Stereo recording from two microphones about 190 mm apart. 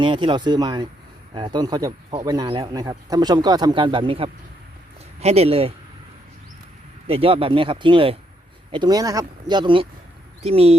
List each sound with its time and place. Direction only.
0.0 s speech: 25° right (ahead or behind)
7.1 s speech: 30° right (ahead or behind)